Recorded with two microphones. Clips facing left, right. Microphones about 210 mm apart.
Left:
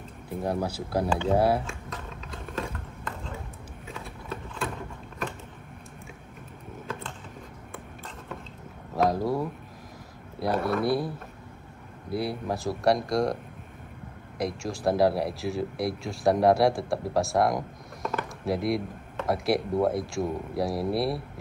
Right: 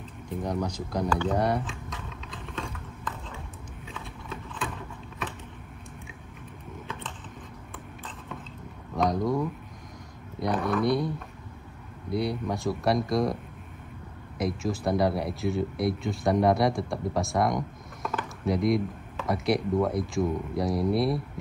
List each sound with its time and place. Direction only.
0.4 s speech: 5° left (ahead or behind)
8.9 s a sound: 5° left (ahead or behind)
9.2 s speech: 30° left (ahead or behind)
10.4 s a sound: 5° left (ahead or behind)
10.8 s speech: 5° left (ahead or behind)
14.4 s speech: centre (ahead or behind)